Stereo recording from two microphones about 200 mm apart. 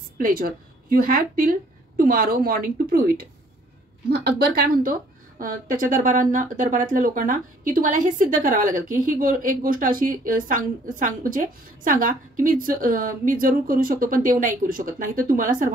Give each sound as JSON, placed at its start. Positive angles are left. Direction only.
{"t": 0.2, "sound": "a woman's voice", "side_deg": -50}